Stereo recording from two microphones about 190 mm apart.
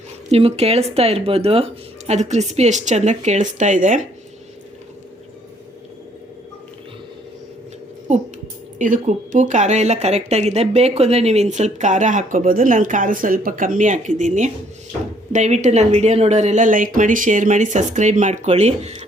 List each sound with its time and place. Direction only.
0.3 s speech: 30° right (ahead or behind)
8.8 s speech: 45° right (ahead or behind)